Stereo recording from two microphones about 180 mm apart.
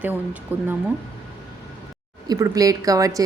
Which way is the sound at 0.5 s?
10° right (ahead or behind).